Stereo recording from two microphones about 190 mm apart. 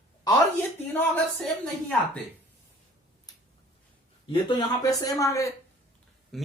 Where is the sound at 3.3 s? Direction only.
20° left (ahead or behind).